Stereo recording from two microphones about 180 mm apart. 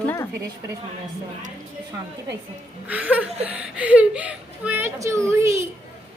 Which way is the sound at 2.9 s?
10° right (ahead or behind).